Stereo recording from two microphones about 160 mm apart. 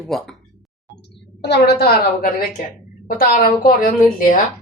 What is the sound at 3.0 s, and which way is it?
A woman's voice, 65° left (ahead or behind).